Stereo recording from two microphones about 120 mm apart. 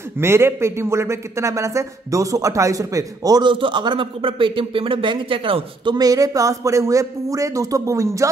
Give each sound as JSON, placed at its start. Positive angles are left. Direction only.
{"t": 0.2, "sound": "a man's voice", "side_deg": -20}